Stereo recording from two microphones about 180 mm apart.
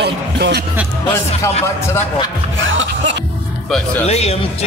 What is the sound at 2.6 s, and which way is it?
Music, 90° right.